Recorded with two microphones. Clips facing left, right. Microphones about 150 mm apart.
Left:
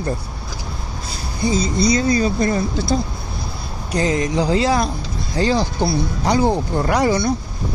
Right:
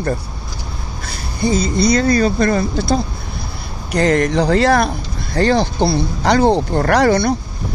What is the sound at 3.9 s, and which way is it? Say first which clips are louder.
Speech: right 4 dB; 65° right (ahead or behind).